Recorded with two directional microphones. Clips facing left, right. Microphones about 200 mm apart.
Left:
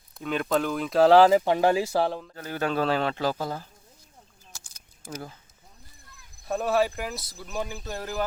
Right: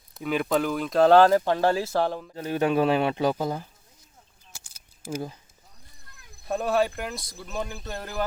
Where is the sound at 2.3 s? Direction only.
20° right (ahead or behind).